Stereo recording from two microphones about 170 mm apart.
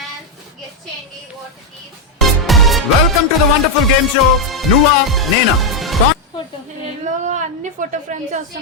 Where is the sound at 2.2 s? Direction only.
Centre (ahead or behind).